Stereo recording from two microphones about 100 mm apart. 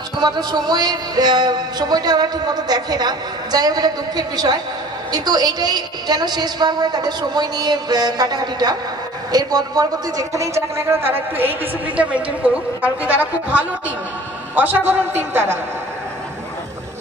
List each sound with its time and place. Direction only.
0.2 s speech: 45° right (ahead or behind); by 11.5 s 20° right (ahead or behind)
12.8 s a man's voice: 15° right (ahead or behind)